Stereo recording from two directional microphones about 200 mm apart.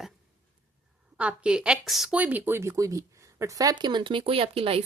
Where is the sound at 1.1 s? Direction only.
5° right (ahead or behind).